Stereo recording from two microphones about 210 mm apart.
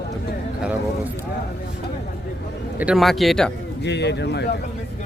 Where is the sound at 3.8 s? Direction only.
55° left (ahead or behind).